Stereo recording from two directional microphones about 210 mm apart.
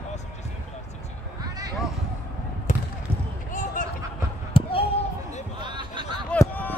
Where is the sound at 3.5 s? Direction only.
40° left (ahead or behind).